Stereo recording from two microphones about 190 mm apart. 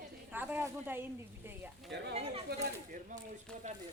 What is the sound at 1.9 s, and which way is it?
Speech, 65° right (ahead or behind).